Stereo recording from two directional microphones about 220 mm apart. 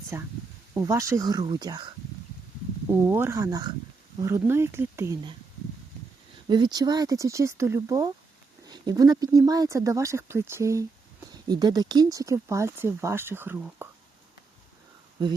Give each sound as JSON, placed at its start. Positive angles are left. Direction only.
{"t": 0.1, "sound": "speech", "side_deg": -10}
{"t": 3.1, "sound": "speech", "side_deg": -10}
{"t": 6.5, "sound": "speech", "side_deg": -20}